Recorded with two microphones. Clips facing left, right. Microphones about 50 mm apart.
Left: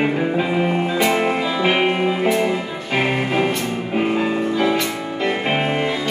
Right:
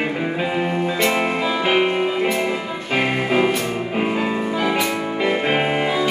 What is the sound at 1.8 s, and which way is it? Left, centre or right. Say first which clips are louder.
Music: left 1 dB; centre.